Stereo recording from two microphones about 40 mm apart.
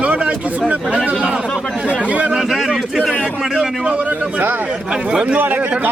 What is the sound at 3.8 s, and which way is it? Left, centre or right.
Speech, right.